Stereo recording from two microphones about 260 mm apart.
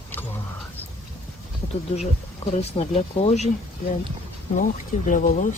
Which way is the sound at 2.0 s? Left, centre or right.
Left.